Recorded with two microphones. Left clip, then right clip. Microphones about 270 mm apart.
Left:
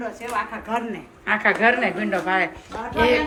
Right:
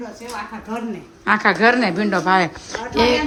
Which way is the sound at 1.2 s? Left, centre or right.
Centre.